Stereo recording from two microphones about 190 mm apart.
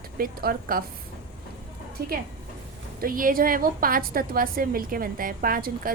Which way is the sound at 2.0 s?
55° right (ahead or behind).